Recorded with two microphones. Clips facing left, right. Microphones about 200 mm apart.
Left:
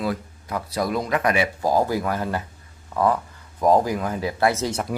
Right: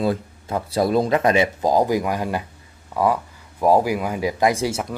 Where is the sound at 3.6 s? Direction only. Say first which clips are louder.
Right 1 dB; 10° right (ahead or behind).